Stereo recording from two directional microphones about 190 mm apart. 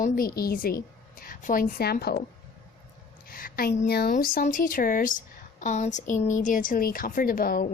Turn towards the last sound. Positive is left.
turn(degrees=50)  # may be behind; listen again after turning